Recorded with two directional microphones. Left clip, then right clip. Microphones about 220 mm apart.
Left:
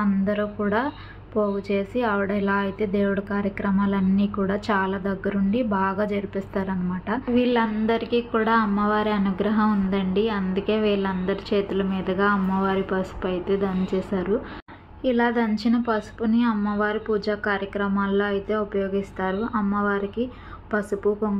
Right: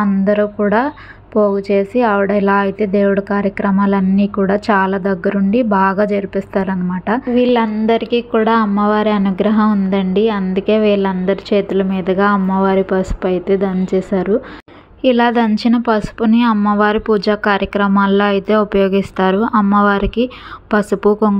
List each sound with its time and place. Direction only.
0.0 s a woman's voice: 30° right (ahead or behind); by 21.3 s 45° right (ahead or behind)